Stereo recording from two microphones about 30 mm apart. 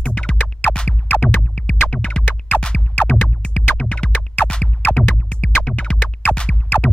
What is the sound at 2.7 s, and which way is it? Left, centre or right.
Music, left.